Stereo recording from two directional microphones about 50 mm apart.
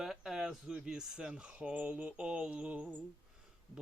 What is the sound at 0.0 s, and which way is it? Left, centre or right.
Speech, centre.